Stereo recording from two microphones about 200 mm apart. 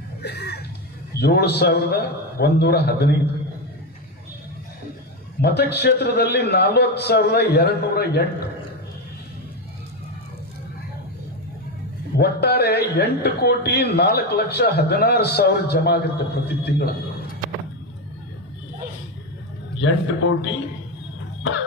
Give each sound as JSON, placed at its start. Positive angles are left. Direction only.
{"t": 0.2, "sound": "music", "side_deg": 55}
{"t": 1.1, "sound": "a man's voice", "side_deg": 55}
{"t": 5.4, "sound": "a man's voice", "side_deg": 55}
{"t": 12.2, "sound": "a man's voice", "side_deg": 55}
{"t": 19.8, "sound": "a man's voice", "side_deg": 70}